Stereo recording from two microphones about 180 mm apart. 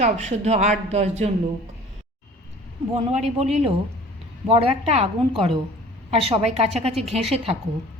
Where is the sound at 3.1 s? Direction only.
40° right (ahead or behind).